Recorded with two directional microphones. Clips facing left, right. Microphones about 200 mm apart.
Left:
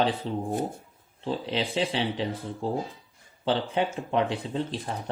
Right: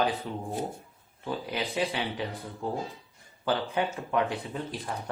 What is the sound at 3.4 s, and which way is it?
Speech, 25° left (ahead or behind).